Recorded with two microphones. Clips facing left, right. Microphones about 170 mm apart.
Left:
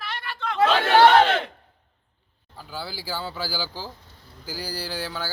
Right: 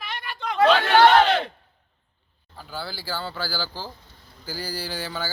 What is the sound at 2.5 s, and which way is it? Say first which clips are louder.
Speech: even; 10° left (ahead or behind).